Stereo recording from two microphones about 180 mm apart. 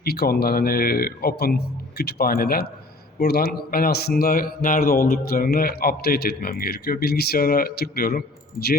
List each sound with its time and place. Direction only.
0.0 s a man's voice: 60° left (ahead or behind)